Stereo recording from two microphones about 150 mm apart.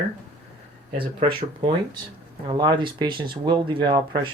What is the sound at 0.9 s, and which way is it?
Speech, 35° right (ahead or behind).